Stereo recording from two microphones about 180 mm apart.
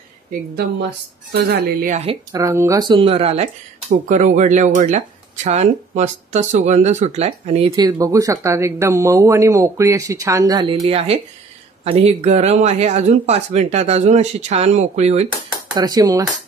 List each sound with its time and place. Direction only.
0.6 s speech: 65° right (ahead or behind)
1.9 s speech: 40° right (ahead or behind)
2.3 s speech: 15° right (ahead or behind); by 3.4 s 35° right (ahead or behind)
3.9 s speech: 45° right (ahead or behind)
7.7 s speech: 20° right (ahead or behind); by 15.2 s 35° right (ahead or behind)
15.7 s speech: 20° right (ahead or behind)